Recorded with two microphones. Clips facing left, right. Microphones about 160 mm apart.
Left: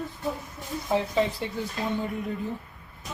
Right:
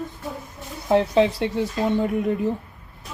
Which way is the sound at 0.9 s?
75° right (ahead or behind).